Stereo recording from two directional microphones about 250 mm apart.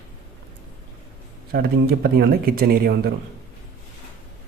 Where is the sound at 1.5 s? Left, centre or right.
Right.